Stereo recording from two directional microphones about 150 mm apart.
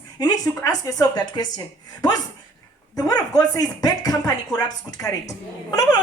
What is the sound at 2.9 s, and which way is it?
A woman's voice, 25° left (ahead or behind).